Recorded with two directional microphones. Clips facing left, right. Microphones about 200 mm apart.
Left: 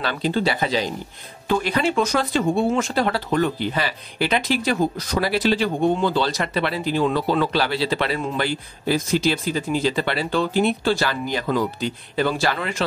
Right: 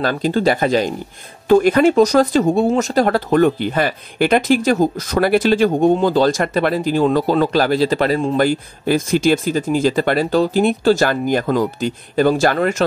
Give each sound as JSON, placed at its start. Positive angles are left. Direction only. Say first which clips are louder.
{"t": 0.0, "sound": "speech", "louder": "right 6 dB", "side_deg": -45}